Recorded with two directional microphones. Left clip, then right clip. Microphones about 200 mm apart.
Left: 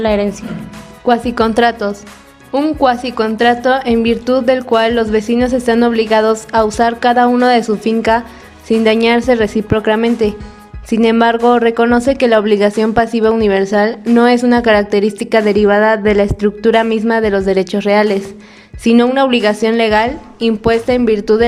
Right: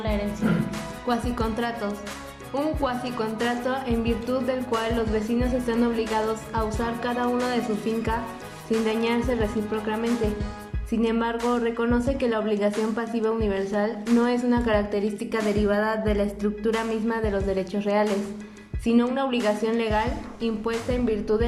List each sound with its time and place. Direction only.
0.0 s a woman's voice: 55° left (ahead or behind)